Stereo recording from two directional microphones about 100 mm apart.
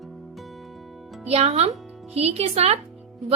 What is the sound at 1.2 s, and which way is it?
A woman's voice, 90° right.